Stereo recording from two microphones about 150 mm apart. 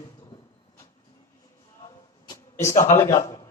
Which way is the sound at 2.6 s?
20° left (ahead or behind).